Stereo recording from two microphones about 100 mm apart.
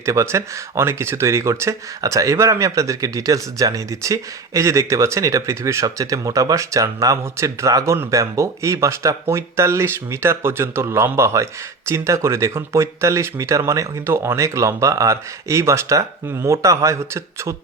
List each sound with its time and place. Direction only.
0.0 s speech: 30° right (ahead or behind)